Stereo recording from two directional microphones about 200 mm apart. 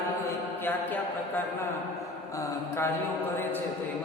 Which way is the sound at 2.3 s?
15° left (ahead or behind).